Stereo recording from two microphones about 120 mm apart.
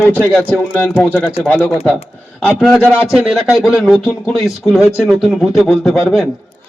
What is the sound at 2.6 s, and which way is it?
Speech, centre (ahead or behind).